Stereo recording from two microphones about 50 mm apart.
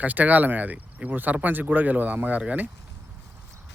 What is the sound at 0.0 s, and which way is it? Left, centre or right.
Speech, right.